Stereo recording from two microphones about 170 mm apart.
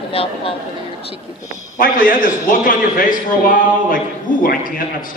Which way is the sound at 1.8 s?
55° left (ahead or behind).